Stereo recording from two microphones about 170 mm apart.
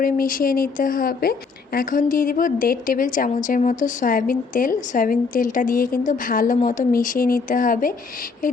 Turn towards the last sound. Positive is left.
turn(degrees=50)  # may be behind; listen again after turning